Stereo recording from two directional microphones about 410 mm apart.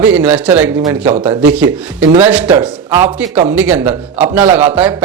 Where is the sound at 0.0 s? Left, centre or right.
Centre.